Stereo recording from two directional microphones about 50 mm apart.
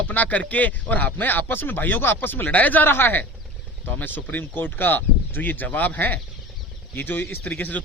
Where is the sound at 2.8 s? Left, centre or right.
Left.